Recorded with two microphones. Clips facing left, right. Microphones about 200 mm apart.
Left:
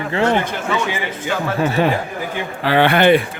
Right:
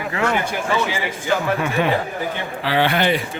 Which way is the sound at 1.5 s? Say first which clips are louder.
Left 4 dB; 30° left (ahead or behind).